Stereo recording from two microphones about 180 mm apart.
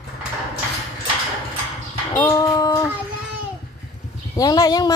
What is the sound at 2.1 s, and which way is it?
Speech, 10° left (ahead or behind).